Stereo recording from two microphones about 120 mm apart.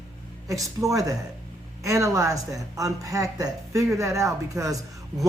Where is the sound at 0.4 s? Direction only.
25° right (ahead or behind).